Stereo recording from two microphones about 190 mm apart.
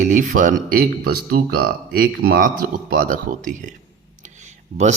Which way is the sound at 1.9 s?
50° right (ahead or behind).